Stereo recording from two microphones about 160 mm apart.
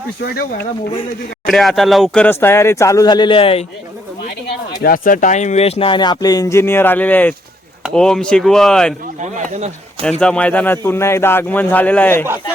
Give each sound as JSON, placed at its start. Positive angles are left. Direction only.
{"t": 0.2, "sound": "speech", "side_deg": 75}
{"t": 1.5, "sound": "speech", "side_deg": 0}
{"t": 4.8, "sound": "speech", "side_deg": 60}
{"t": 9.2, "sound": "speech", "side_deg": -50}
{"t": 10.0, "sound": "speech", "side_deg": 5}